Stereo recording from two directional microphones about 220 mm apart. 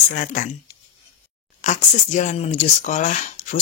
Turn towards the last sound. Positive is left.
turn(degrees=35)  # may be behind; listen again after turning